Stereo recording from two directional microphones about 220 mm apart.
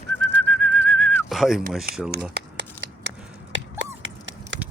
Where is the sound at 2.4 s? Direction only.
50° right (ahead or behind).